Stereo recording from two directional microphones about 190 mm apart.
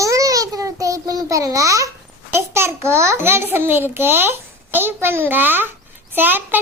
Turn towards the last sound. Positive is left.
turn(degrees=-10)  # may be behind; listen again after turning